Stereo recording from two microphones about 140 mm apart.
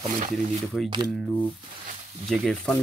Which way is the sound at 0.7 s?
5° right (ahead or behind).